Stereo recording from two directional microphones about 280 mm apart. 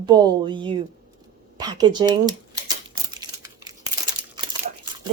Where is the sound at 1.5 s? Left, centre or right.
Centre.